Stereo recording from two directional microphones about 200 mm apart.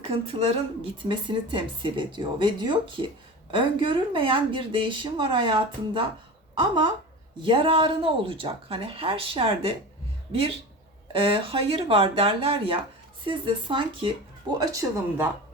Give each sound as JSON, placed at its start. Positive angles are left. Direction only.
{"t": 0.1, "sound": "speech", "side_deg": -30}
{"t": 11.1, "sound": "speech", "side_deg": -25}
{"t": 14.6, "sound": "speech", "side_deg": -15}